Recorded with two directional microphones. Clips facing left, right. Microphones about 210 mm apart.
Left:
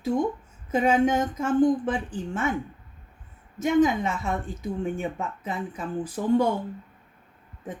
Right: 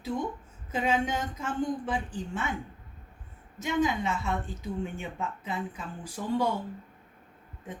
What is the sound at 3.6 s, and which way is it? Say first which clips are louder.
Speech: left 7 dB; 45° left (ahead or behind).